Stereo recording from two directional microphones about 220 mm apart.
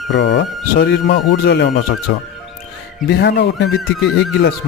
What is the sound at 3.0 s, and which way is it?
Speech, 50° left (ahead or behind).